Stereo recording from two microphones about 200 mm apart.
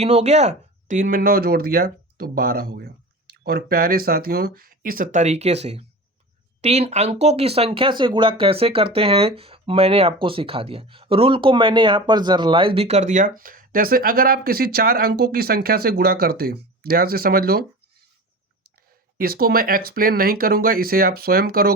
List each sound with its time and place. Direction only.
0.0 s speech: 35° right (ahead or behind); by 17.7 s 50° right (ahead or behind)
19.1 s speech: 50° right (ahead or behind)